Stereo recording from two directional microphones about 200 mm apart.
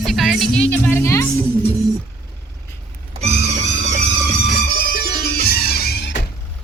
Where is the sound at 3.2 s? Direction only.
35° right (ahead or behind).